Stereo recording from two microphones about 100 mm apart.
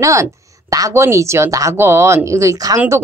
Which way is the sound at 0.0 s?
30° right (ahead or behind).